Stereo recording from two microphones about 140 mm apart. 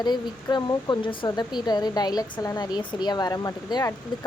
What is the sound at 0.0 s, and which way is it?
Speech, 30° left (ahead or behind).